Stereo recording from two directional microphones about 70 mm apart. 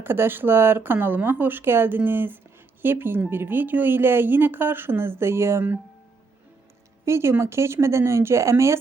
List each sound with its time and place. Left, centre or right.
0.0 s speech: right
7.0 s speech: right